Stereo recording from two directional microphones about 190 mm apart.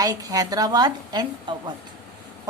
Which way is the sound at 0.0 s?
20° right (ahead or behind).